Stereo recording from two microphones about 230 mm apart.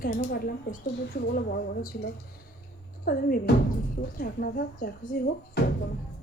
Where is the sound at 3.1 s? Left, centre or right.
Left.